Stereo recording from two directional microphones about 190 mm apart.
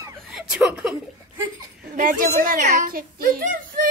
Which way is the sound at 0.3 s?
5° right (ahead or behind).